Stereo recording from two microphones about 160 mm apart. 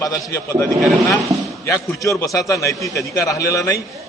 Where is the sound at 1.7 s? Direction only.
20° left (ahead or behind).